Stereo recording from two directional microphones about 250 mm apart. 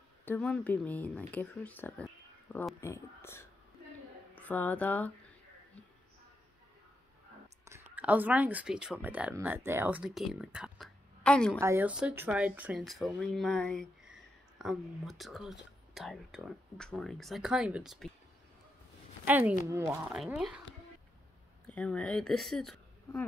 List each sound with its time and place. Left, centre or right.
0.2 s speech: centre
2.8 s a sound: centre
7.6 s speech: centre
11.6 s speech: centre
19.2 s speech: centre
21.6 s speech: centre